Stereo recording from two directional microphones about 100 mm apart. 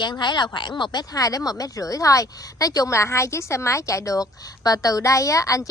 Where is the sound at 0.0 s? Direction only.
50° left (ahead or behind).